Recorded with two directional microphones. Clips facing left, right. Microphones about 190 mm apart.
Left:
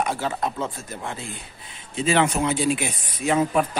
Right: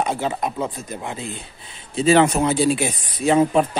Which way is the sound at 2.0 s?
35° right (ahead or behind).